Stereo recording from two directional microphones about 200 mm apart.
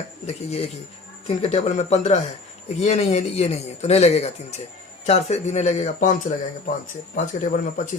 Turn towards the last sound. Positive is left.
turn(degrees=35)  # may be behind; listen again after turning